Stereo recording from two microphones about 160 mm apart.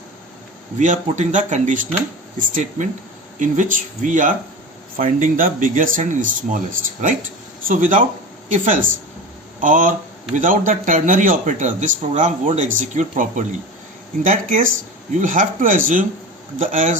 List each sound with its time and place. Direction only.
0.8 s a man's voice: 50° right (ahead or behind)